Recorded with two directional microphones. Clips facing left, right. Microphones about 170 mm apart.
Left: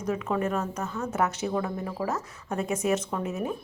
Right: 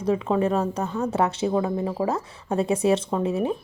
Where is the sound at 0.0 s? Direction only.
30° right (ahead or behind).